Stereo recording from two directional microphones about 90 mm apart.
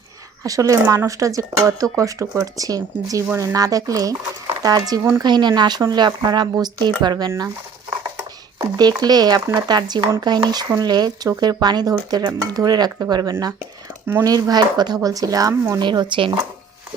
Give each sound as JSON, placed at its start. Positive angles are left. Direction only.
{"t": 0.4, "sound": "speech", "side_deg": -35}
{"t": 8.6, "sound": "speech", "side_deg": -50}
{"t": 15.8, "sound": "speech", "side_deg": -60}